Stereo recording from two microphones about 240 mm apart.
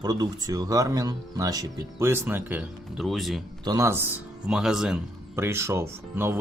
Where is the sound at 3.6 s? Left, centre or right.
Centre.